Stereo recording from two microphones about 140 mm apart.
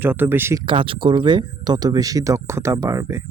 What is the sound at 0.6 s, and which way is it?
Speech, 40° right (ahead or behind).